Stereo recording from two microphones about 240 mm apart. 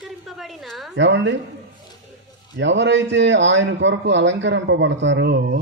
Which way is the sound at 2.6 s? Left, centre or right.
Right.